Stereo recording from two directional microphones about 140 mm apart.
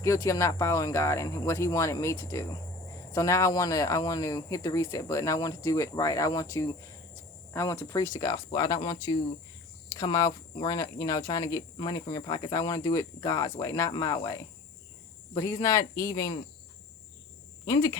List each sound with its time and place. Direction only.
0.0 s speech: 20° left (ahead or behind)
17.7 s speech: 25° left (ahead or behind)